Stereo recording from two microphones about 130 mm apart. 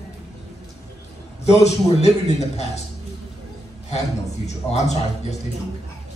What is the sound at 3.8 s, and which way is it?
Speech, 55° left (ahead or behind).